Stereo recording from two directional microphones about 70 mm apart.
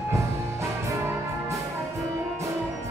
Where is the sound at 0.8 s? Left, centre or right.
Right.